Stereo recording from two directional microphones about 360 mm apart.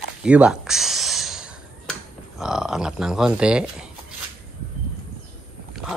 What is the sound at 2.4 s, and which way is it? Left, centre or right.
Speech, centre.